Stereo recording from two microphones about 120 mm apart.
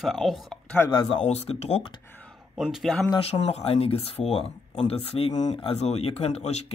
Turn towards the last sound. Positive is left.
turn(degrees=65)  # may be behind; listen again after turning